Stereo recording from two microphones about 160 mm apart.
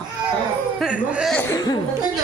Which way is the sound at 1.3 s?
15° left (ahead or behind).